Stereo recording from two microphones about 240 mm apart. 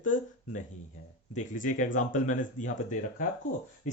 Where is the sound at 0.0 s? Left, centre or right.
Left.